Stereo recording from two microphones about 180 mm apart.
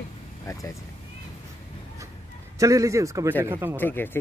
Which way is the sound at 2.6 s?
15° right (ahead or behind).